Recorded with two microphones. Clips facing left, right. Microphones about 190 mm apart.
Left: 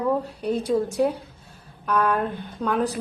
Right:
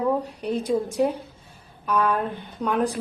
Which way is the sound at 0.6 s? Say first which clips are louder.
Left 1 dB; 10° left (ahead or behind).